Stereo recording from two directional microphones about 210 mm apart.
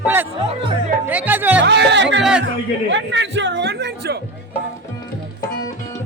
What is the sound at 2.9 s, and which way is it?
Chatter, 60° right (ahead or behind).